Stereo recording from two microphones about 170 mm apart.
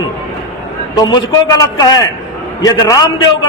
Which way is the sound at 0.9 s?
25° left (ahead or behind).